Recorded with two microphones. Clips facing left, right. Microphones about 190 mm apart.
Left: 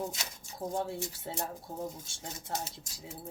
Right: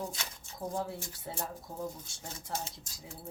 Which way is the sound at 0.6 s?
25° left (ahead or behind).